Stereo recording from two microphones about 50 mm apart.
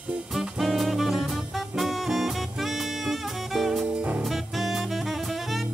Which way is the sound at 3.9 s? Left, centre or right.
Right.